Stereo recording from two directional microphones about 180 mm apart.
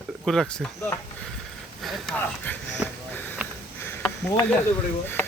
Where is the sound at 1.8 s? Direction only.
Centre (ahead or behind).